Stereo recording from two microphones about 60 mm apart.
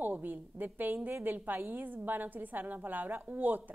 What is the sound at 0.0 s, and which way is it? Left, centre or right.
A woman's voice, right.